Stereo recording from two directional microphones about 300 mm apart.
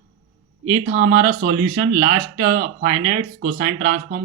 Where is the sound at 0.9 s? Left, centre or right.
Right.